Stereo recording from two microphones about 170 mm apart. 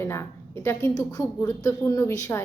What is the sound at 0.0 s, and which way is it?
A woman's voice, 15° left (ahead or behind).